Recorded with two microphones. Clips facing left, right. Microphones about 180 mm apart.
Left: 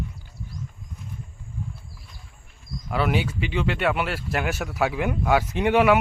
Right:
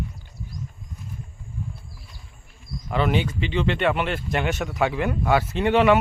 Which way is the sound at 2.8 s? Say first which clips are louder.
Right 1 dB; 5° left (ahead or behind).